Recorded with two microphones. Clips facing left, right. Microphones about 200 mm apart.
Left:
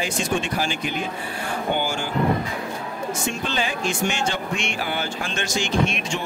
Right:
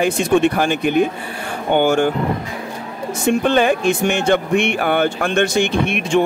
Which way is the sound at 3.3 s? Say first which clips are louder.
Right 15 dB; 55° right (ahead or behind).